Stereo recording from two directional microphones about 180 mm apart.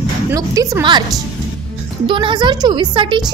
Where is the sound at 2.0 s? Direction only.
25° right (ahead or behind).